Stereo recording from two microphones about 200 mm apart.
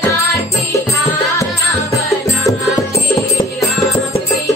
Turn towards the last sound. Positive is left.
turn(degrees=15)  # may be behind; listen again after turning